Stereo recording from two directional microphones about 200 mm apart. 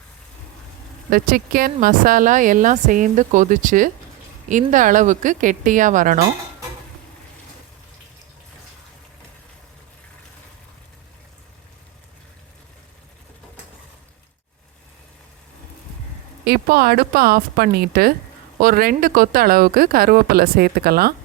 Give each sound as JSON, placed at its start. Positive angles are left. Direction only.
{"t": 1.1, "sound": "a woman's voice", "side_deg": -45}
{"t": 16.4, "sound": "speech", "side_deg": -50}